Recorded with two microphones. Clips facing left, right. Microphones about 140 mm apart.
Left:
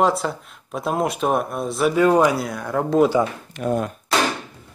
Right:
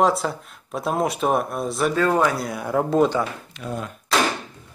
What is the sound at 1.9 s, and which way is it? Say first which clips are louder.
Speech: left 5 dB; 15° left (ahead or behind).